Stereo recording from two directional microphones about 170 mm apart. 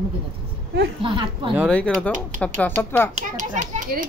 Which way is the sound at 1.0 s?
30° right (ahead or behind).